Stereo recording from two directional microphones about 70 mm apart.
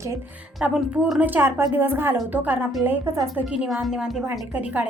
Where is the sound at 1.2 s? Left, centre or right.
Right.